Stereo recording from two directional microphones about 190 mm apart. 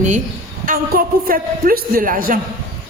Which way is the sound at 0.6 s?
50° right (ahead or behind).